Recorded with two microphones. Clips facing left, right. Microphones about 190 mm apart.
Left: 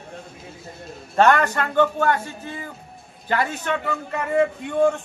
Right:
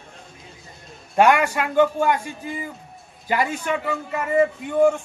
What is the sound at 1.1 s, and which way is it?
A man's voice, 10° right (ahead or behind).